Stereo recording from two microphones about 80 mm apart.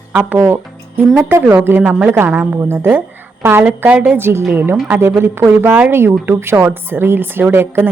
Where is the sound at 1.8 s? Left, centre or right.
Centre.